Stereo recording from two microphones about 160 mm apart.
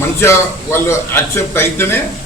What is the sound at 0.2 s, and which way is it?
A man's voice, 15° left (ahead or behind).